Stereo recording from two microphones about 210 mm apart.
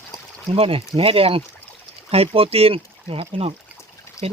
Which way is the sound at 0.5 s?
25° right (ahead or behind).